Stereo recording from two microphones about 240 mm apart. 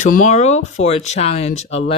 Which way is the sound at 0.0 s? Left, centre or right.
Left.